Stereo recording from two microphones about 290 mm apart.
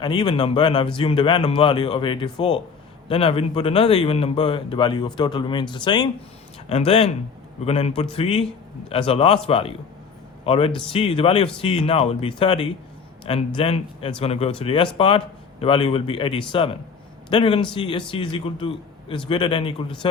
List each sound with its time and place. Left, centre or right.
0.0 s a man's voice: centre